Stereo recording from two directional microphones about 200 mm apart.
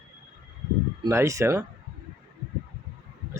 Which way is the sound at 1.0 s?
15° right (ahead or behind).